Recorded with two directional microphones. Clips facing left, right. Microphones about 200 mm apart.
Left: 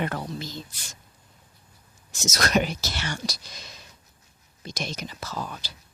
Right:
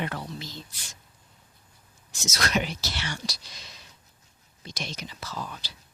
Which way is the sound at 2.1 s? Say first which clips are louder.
Left 3 dB; 45° left (ahead or behind).